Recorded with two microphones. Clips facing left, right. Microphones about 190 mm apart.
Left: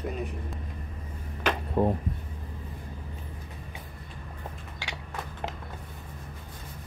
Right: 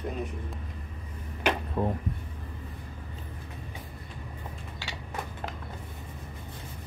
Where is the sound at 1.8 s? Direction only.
35° left (ahead or behind).